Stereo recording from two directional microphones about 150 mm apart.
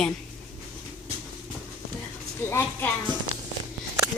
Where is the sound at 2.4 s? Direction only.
15° left (ahead or behind).